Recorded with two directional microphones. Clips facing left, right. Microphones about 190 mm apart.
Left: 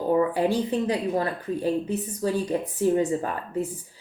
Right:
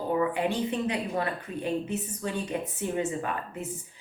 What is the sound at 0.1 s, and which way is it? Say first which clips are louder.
Speech: left 5 dB; 35° left (ahead or behind).